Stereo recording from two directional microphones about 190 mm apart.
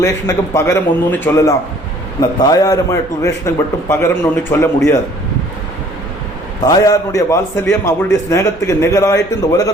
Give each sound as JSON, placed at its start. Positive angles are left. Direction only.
{"t": 0.0, "sound": "a man's voice", "side_deg": 15}
{"t": 6.6, "sound": "a man's voice", "side_deg": 20}